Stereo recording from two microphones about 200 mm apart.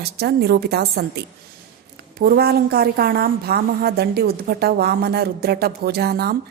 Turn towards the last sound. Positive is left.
turn(degrees=-50)  # may be behind; listen again after turning